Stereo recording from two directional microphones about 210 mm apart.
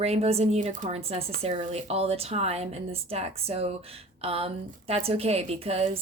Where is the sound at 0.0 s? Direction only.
30° right (ahead or behind).